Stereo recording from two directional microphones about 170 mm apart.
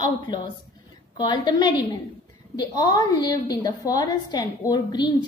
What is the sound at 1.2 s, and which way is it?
A woman's voice, 25° left (ahead or behind).